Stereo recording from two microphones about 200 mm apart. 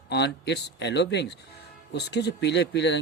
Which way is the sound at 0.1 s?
60° left (ahead or behind).